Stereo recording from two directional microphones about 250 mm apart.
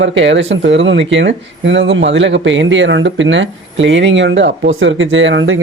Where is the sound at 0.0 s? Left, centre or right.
Right.